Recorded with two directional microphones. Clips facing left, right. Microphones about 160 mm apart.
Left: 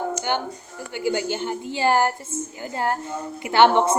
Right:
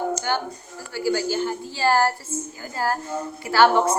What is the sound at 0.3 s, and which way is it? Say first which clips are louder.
A woman's voice: even; 20° left (ahead or behind).